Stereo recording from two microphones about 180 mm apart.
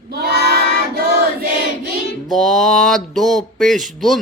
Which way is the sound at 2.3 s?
Centre (ahead or behind).